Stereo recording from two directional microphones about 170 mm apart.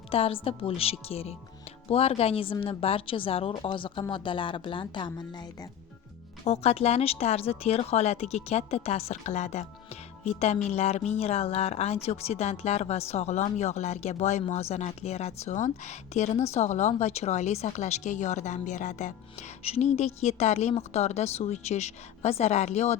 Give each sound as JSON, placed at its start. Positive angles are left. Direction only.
{"t": 0.1, "sound": "a woman's voice", "side_deg": 35}
{"t": 6.4, "sound": "a woman's voice", "side_deg": 40}